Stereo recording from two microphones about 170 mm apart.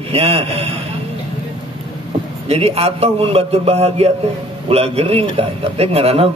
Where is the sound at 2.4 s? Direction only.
35° right (ahead or behind).